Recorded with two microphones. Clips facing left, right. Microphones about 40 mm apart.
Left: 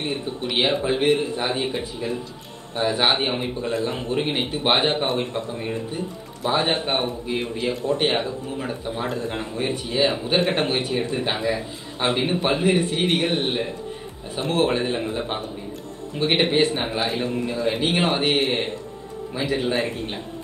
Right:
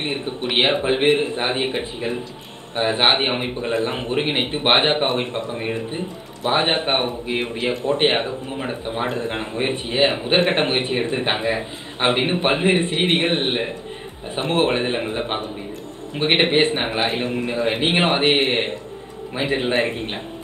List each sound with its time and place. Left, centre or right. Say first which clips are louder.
0.0 s a man's voice: right 2 dB; right